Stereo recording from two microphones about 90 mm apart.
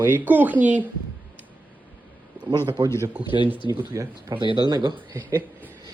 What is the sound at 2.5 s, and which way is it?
Speech, 55° right (ahead or behind).